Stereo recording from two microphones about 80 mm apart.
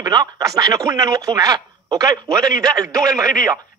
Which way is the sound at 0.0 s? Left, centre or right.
Right.